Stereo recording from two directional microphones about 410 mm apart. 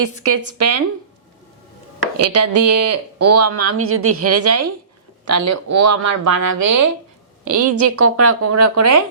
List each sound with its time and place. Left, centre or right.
0.0 s speech: right
2.2 s speech: right